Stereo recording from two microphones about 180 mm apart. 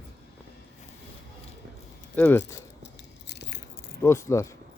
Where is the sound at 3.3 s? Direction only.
70° left (ahead or behind).